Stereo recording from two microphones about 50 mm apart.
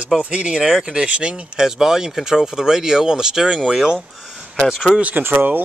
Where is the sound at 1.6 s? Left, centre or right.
Centre.